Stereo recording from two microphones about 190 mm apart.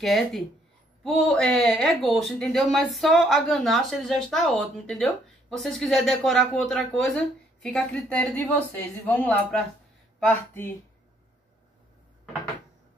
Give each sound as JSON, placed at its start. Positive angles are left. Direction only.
{"t": 0.0, "sound": "speech", "side_deg": 0}